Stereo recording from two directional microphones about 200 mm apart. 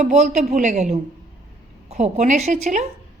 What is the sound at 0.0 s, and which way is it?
A woman's voice, 35° right (ahead or behind).